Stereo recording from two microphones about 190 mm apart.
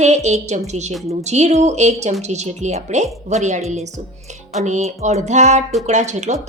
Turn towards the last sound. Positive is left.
turn(degrees=-40)  # may be behind; listen again after turning